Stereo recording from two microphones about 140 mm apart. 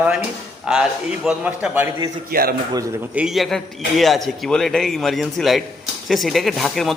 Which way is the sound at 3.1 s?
5° right (ahead or behind).